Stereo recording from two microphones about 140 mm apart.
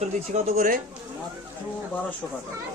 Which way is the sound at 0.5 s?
75° right (ahead or behind).